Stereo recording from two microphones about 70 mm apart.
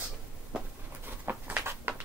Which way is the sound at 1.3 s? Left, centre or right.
Right.